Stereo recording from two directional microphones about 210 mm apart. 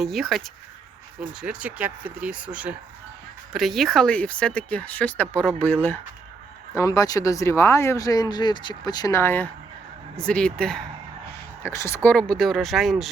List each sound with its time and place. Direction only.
0.0 s speech: centre (ahead or behind)